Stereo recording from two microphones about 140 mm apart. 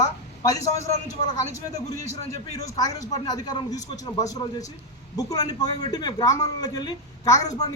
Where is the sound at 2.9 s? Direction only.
25° left (ahead or behind).